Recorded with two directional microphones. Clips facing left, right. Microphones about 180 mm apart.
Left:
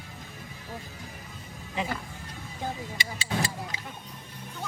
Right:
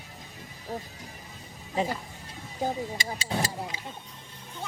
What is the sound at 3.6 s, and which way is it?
Vehicle, 25° right (ahead or behind).